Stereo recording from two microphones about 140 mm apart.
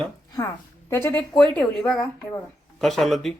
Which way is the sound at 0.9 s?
20° left (ahead or behind).